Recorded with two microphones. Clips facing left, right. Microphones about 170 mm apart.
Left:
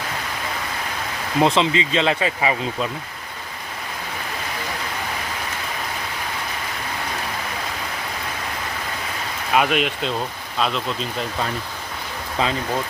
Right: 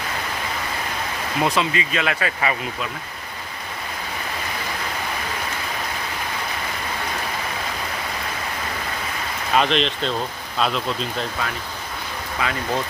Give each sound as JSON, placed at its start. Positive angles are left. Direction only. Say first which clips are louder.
{"t": 1.4, "sound": "speech", "louder": "left 4 dB", "side_deg": 25}
{"t": 9.6, "sound": "speech", "louder": "even", "side_deg": 10}
{"t": 12.4, "sound": "speech", "louder": "left 4 dB", "side_deg": 30}